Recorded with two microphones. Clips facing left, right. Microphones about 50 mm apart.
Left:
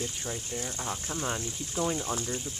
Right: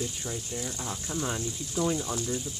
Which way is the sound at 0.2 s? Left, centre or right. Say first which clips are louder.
Even; centre.